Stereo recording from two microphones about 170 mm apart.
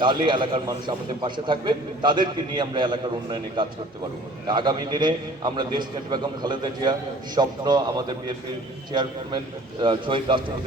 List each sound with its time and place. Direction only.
0.0 s a man's voice: 30° right (ahead or behind)